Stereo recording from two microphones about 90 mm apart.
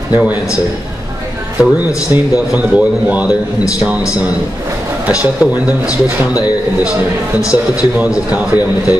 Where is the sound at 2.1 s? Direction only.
25° right (ahead or behind).